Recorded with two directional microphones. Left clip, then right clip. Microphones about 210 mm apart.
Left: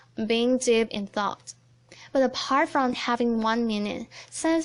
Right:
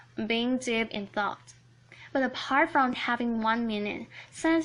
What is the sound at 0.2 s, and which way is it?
Speech, 45° left (ahead or behind).